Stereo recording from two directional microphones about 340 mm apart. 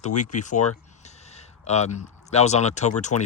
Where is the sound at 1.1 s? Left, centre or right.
Centre.